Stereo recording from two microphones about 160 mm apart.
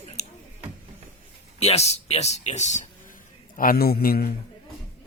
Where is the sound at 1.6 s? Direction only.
40° left (ahead or behind).